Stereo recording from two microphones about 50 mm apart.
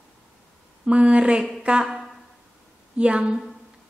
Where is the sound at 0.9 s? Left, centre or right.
Right.